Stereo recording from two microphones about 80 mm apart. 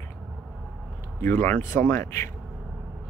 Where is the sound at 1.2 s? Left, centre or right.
Left.